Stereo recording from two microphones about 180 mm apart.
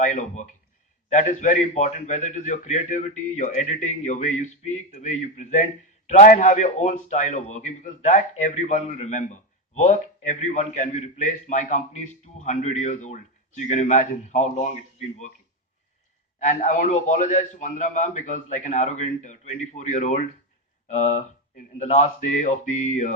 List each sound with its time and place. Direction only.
0.0 s a man's voice: 40° left (ahead or behind)
16.4 s a man's voice: 40° left (ahead or behind)